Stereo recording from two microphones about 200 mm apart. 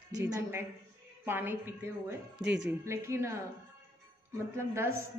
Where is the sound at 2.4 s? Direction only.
60° right (ahead or behind).